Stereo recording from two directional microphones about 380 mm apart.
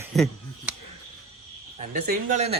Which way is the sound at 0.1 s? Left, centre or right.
Centre.